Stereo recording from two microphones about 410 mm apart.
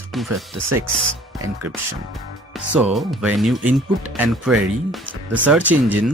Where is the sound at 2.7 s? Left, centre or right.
Centre.